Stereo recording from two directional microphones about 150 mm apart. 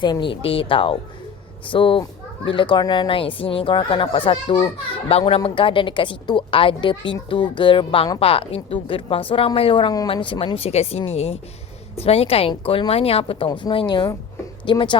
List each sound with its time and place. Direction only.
0.0 s speech: 30° left (ahead or behind)